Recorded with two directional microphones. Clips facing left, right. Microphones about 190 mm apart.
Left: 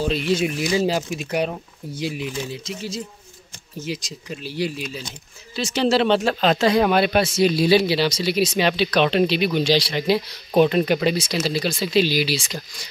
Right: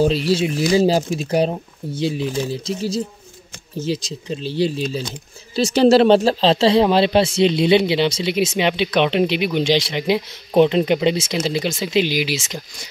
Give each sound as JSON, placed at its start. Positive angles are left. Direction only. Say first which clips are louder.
{"t": 0.0, "sound": "speech", "louder": "right 4 dB", "side_deg": -35}